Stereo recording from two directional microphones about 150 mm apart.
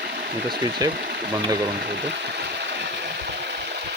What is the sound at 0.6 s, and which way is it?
Speech, 30° right (ahead or behind).